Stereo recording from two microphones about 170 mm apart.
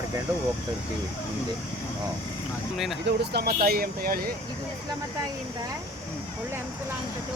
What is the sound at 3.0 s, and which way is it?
Speech, 70° right (ahead or behind).